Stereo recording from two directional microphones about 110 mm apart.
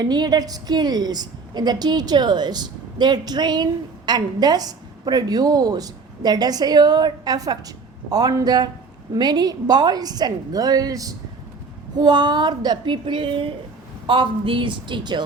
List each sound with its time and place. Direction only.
0.0 s a woman's voice: 40° right (ahead or behind)